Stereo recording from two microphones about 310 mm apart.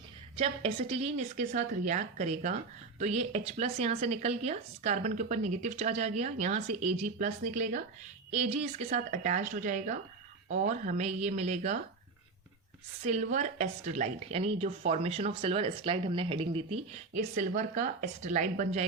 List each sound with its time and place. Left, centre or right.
0.3 s speech: centre
13.1 s speech: right